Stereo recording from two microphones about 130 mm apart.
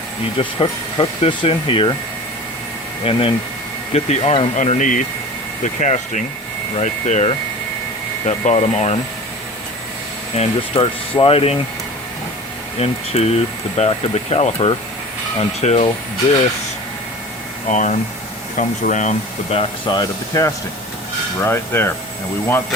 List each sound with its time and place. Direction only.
0.3 s speech: 45° left (ahead or behind)
3.0 s speech: 45° left (ahead or behind)
4.5 s speech: 65° left (ahead or behind)
8.4 s speech: 55° left (ahead or behind)
10.4 s speech: 55° left (ahead or behind)
10.8 s speech: 40° left (ahead or behind)
12.8 s speech: 55° left (ahead or behind)
17.7 s speech: 70° left (ahead or behind)
19.9 s speech: 30° left (ahead or behind)
21.4 s speech: 15° left (ahead or behind)